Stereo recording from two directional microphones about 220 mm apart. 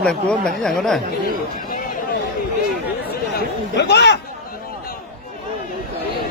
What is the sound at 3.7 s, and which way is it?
Speech, 50° left (ahead or behind).